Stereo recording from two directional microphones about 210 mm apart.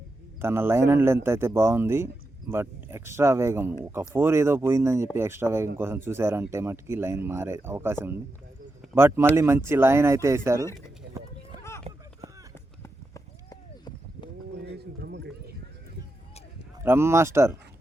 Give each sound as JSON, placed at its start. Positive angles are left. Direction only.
{"t": 0.4, "sound": "a man's voice", "side_deg": -10}
{"t": 12.8, "sound": "run", "side_deg": 15}
{"t": 14.7, "sound": "horse", "side_deg": -55}
{"t": 16.8, "sound": "speech", "side_deg": -10}